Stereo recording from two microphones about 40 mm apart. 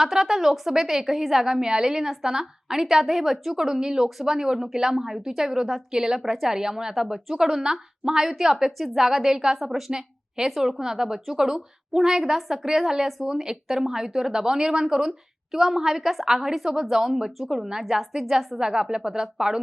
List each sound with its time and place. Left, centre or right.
0.0 s a woman's voice: centre
2.8 s a woman's voice: centre
18.6 s a woman's voice: centre